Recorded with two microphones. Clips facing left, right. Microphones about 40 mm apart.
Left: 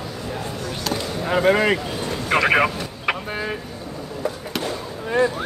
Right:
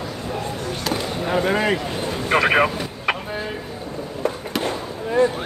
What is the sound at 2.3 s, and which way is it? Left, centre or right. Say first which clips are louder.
Speech: even; centre.